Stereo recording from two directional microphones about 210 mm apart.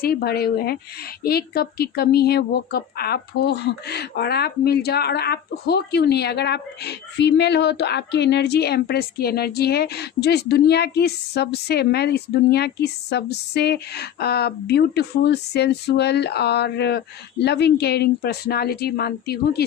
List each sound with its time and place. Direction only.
0.0 s speech: 45° left (ahead or behind)